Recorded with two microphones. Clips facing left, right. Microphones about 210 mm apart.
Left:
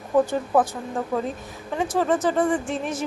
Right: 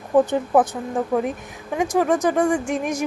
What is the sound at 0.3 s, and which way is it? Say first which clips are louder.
A woman's voice: right 3 dB; 20° right (ahead or behind).